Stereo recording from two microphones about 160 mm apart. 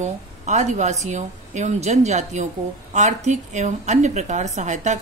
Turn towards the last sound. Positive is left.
turn(degrees=-50)  # may be behind; listen again after turning